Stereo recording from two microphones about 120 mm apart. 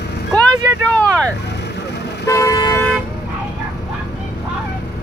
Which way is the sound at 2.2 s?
25° left (ahead or behind).